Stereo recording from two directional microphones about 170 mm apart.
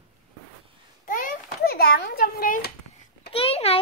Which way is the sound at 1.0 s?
55° left (ahead or behind).